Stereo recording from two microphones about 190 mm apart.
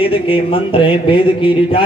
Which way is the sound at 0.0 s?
30° left (ahead or behind).